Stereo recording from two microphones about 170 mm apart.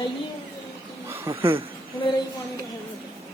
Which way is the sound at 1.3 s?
30° right (ahead or behind).